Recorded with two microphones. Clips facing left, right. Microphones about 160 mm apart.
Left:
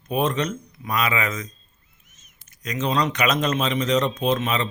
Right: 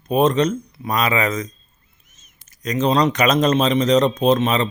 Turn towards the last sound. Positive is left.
turn(degrees=-35)  # may be behind; listen again after turning